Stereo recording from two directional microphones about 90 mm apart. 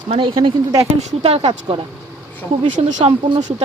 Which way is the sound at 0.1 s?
65° right (ahead or behind).